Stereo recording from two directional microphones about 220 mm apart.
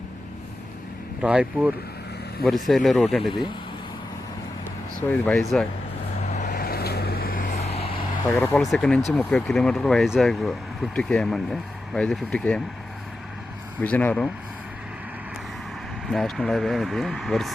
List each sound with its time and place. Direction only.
1.2 s speech: 5° right (ahead or behind)
3.2 s speech: 20° left (ahead or behind)
5.0 s speech: 5° left (ahead or behind)
6.3 s vehicle: 40° left (ahead or behind)
8.4 s speech: centre (ahead or behind)
13.8 s speech: 5° left (ahead or behind)
16.0 s speech: centre (ahead or behind)